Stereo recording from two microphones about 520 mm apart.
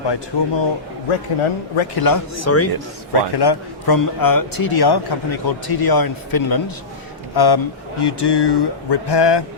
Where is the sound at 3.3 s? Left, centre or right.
Left.